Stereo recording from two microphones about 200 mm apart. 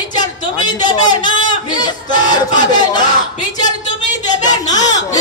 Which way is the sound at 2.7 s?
20° left (ahead or behind).